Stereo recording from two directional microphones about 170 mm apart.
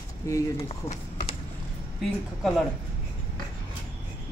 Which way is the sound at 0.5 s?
35° left (ahead or behind).